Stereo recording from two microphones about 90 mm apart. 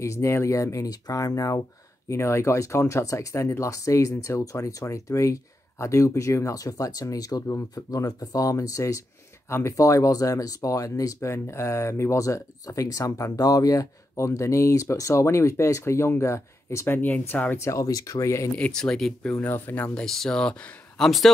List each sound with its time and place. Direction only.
0.0 s speech: 35° left (ahead or behind)
16.8 s speech: 20° left (ahead or behind)
17.6 s speech: 35° left (ahead or behind)
18.6 s speech: 10° left (ahead or behind)
19.4 s speech: 20° left (ahead or behind)
19.9 s speech: 10° left (ahead or behind)